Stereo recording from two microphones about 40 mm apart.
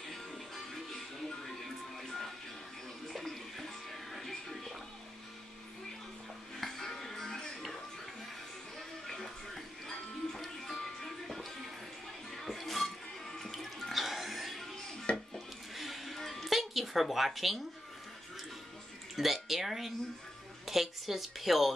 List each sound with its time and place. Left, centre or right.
1.4 s music: centre
6.6 s music: centre
8.7 s music: centre
15.1 s dishes: left
15.7 s music: centre
19.1 s a woman's voice: centre